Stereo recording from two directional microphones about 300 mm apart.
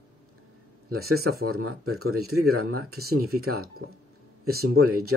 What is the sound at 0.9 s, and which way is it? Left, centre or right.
Speech, right.